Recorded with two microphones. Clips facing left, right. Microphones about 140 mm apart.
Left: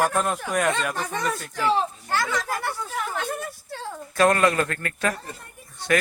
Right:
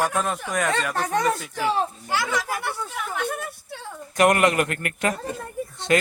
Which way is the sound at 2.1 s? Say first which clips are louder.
Even; 5° right (ahead or behind).